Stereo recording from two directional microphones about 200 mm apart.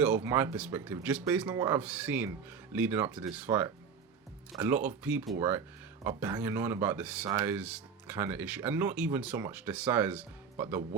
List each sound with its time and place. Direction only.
0.0 s speech: 10° right (ahead or behind)